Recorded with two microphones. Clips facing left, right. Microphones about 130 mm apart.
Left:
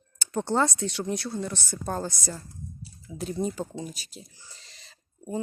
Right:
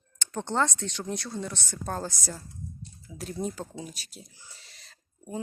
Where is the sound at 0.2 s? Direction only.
10° left (ahead or behind).